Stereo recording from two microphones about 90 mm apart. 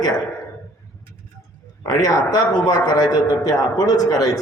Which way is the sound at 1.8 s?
45° left (ahead or behind).